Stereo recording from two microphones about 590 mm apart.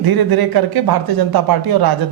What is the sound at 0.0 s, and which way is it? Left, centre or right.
Speech, right.